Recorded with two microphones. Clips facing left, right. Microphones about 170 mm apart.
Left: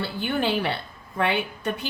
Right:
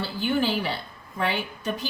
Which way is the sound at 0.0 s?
60° left (ahead or behind).